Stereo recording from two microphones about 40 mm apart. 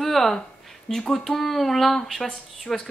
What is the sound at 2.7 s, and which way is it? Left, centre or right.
Speech, centre.